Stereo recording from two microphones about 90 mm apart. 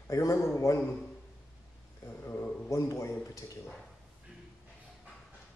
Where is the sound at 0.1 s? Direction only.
35° left (ahead or behind).